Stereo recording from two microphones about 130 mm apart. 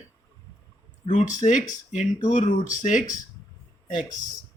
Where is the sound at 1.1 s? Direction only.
70° left (ahead or behind).